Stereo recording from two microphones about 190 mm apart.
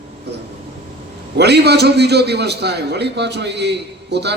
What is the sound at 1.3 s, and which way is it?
A man's voice, 60° right (ahead or behind).